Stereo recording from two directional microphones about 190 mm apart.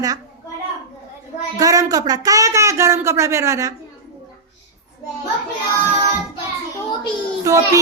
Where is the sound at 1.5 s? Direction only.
20° right (ahead or behind).